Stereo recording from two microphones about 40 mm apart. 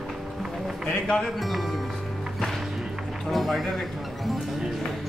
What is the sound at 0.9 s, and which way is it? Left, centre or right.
Music, centre.